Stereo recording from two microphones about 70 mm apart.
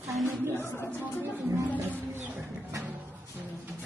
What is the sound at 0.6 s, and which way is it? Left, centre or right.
Speech, left.